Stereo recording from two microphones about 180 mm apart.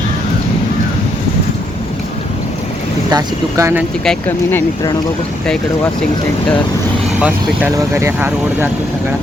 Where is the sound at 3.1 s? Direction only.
20° right (ahead or behind).